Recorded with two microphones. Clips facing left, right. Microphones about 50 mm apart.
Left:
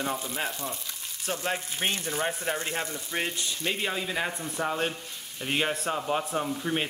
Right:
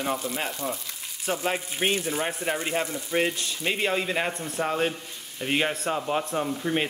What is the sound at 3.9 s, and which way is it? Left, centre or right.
Speech, right.